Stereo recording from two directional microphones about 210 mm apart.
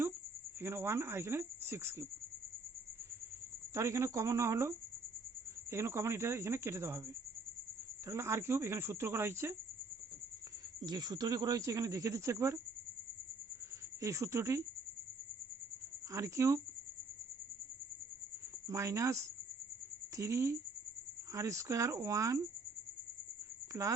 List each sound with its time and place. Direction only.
0.6 s speech: 10° right (ahead or behind)
3.8 s speech: 15° right (ahead or behind)
5.7 s speech: 10° right (ahead or behind)
8.0 s speech: 15° right (ahead or behind)
10.8 s speech: 20° right (ahead or behind)
14.0 s speech: 15° right (ahead or behind)
16.1 s speech: 15° right (ahead or behind)
18.7 s speech: 15° right (ahead or behind)